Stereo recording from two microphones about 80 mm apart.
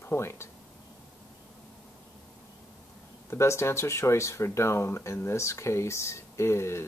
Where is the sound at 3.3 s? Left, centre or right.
Left.